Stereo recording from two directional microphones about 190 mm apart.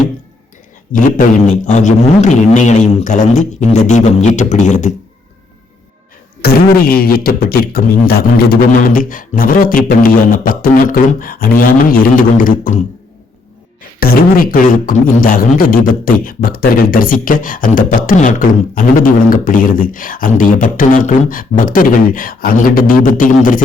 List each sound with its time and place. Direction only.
0.9 s a man's voice: 45° left (ahead or behind)
6.4 s speech: 50° left (ahead or behind)
14.0 s speech: 50° left (ahead or behind)